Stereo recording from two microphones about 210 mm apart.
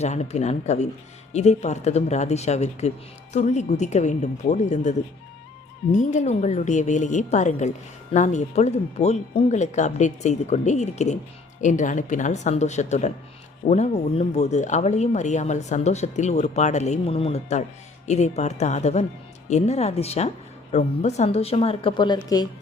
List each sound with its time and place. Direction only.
0.0 s a woman's voice: 30° left (ahead or behind)